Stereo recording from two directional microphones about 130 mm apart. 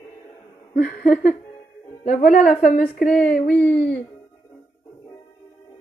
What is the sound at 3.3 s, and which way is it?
Speech, 85° left.